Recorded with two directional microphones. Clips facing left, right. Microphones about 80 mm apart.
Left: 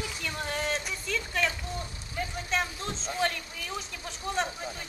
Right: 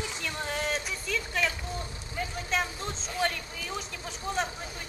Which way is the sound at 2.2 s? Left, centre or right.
Centre.